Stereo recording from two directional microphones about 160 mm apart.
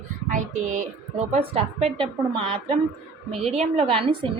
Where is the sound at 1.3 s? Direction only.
40° right (ahead or behind).